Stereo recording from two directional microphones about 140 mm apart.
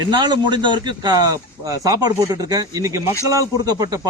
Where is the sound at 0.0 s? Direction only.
30° right (ahead or behind).